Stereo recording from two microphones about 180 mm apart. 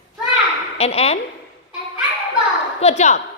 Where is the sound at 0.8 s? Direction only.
35° left (ahead or behind).